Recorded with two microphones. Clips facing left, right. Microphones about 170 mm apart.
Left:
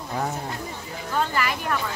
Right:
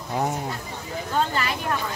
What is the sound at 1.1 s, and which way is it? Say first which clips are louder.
Vehicle: even; 25° right (ahead or behind).